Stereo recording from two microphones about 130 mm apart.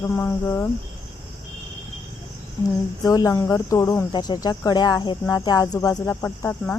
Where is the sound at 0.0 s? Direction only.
20° left (ahead or behind).